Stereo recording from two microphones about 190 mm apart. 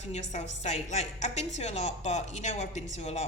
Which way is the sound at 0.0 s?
35° left (ahead or behind).